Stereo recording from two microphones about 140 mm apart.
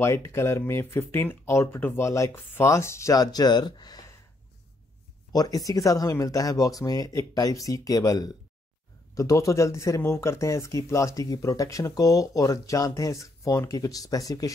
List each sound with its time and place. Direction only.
0.0 s speech: 20° left (ahead or behind)
5.3 s speech: 25° left (ahead or behind)